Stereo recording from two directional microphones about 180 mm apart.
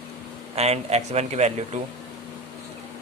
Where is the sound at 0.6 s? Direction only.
35° right (ahead or behind).